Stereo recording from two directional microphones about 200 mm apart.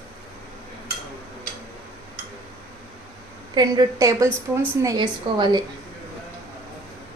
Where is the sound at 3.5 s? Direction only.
20° right (ahead or behind).